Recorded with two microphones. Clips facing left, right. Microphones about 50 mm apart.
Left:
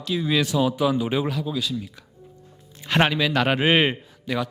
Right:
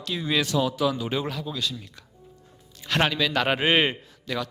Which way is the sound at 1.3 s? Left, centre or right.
Centre.